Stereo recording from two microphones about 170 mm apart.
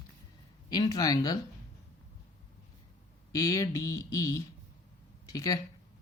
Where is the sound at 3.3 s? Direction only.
20° left (ahead or behind).